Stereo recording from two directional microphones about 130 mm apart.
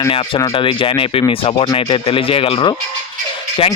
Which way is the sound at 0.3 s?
35° left (ahead or behind).